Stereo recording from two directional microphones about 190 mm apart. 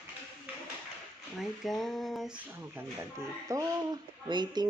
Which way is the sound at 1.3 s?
Centre (ahead or behind).